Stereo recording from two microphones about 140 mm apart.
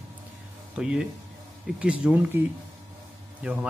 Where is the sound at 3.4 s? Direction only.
10° right (ahead or behind).